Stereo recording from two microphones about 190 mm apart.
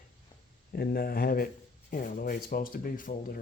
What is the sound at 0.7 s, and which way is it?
Speech, 55° left (ahead or behind).